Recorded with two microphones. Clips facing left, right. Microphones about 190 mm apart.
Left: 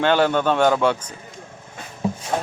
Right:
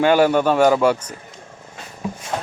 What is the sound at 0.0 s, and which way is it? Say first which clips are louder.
Speech: right 3 dB; 10° right (ahead or behind).